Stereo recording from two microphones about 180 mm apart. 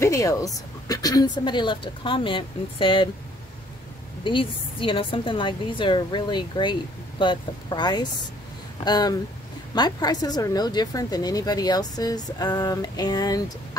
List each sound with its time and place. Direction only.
0.0 s speech: 15° left (ahead or behind)
4.2 s speech: 30° left (ahead or behind)